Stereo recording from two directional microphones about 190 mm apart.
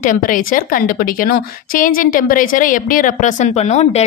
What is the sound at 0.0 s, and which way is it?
A woman's voice, 45° left (ahead or behind).